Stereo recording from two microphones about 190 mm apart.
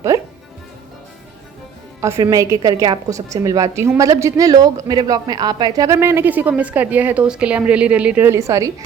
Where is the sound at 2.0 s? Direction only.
15° right (ahead or behind).